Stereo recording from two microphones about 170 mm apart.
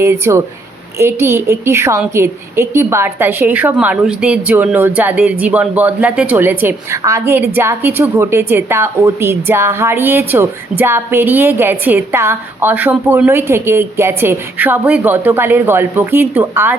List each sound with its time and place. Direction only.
0.0 s a woman's voice: 15° right (ahead or behind)